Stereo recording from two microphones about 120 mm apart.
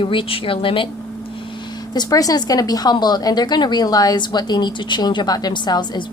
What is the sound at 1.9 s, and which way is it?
A woman's voice, 30° left (ahead or behind).